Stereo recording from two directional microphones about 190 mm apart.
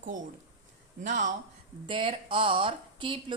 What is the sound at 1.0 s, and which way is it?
Speech, 40° right (ahead or behind).